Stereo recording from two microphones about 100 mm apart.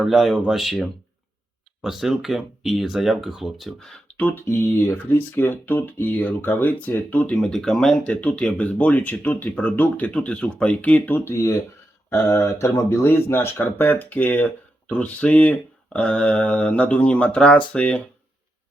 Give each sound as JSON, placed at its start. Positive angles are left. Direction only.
{"t": 0.0, "sound": "speech", "side_deg": 0}
{"t": 4.2, "sound": "speech", "side_deg": 20}